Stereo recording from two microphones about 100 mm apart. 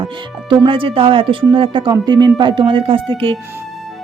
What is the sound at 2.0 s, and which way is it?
Speech, 45° right (ahead or behind).